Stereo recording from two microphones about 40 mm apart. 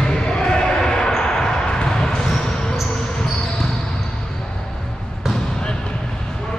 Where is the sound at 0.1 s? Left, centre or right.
Centre.